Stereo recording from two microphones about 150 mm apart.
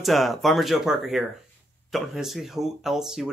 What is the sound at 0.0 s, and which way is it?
Speech, centre (ahead or behind).